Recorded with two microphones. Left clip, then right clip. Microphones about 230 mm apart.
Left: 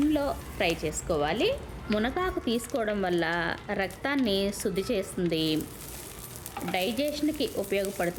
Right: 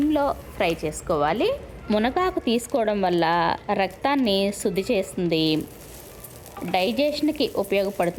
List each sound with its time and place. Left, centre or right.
0.1 s a woman's voice: centre
6.7 s a woman's voice: centre